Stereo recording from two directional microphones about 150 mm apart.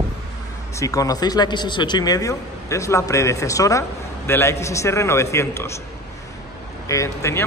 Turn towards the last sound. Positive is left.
turn(degrees=20)  # may be behind; listen again after turning